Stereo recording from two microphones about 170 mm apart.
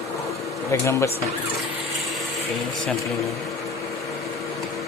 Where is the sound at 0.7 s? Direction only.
15° left (ahead or behind).